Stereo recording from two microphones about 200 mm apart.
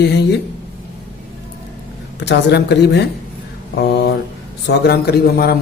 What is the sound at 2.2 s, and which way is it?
Speech, 55° left (ahead or behind).